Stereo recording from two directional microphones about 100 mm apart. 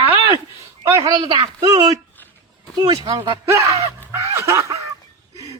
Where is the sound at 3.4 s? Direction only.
30° right (ahead or behind).